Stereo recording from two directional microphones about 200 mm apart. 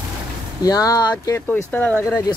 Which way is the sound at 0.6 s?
20° left (ahead or behind).